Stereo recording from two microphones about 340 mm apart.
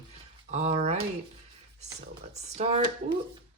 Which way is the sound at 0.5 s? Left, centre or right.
Right.